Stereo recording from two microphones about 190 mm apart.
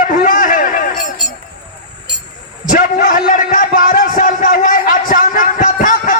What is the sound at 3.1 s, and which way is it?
A man's voice, 45° left (ahead or behind).